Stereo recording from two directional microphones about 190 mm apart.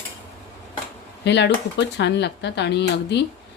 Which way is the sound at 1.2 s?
65° left (ahead or behind).